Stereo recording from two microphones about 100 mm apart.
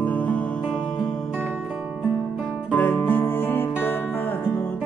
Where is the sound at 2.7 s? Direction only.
15° left (ahead or behind).